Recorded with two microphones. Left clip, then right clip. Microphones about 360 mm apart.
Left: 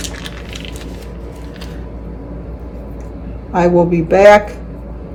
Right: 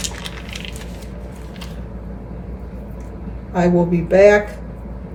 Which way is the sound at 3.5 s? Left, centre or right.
Centre.